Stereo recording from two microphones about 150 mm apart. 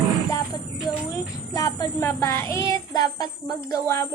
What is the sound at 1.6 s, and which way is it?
A woman's voice, 25° left (ahead or behind).